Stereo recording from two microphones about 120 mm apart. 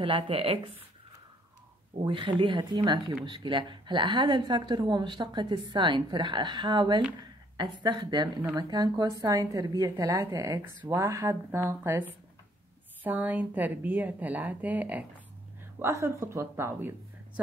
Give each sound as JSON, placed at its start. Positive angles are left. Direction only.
{"t": 0.0, "sound": "speech", "side_deg": -50}
{"t": 2.0, "sound": "a woman's voice", "side_deg": -45}
{"t": 15.8, "sound": "a woman's voice", "side_deg": -25}